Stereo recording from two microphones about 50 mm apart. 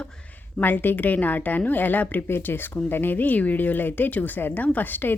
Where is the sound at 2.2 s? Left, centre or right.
Left.